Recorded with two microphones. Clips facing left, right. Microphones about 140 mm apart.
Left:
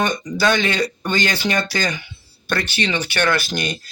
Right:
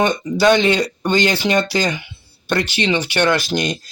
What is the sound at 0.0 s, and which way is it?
Speech, 25° right (ahead or behind).